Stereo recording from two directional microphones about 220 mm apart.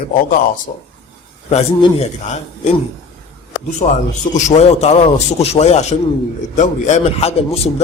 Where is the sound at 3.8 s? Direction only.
25° left (ahead or behind).